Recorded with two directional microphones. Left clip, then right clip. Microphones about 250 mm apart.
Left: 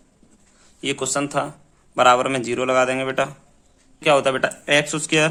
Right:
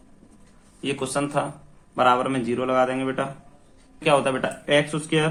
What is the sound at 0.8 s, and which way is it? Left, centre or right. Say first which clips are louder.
Speech: left 3 dB; left.